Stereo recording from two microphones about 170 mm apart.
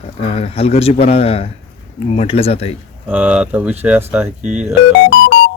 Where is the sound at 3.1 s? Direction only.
10° right (ahead or behind).